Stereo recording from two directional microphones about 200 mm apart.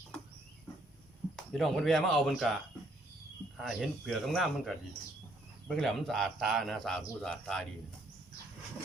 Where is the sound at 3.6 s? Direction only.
Centre (ahead or behind).